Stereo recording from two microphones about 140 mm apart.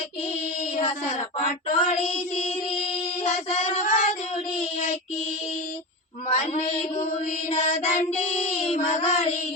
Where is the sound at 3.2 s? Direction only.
50° left (ahead or behind).